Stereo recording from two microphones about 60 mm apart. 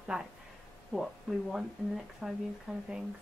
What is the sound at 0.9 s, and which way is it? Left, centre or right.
Speech, centre.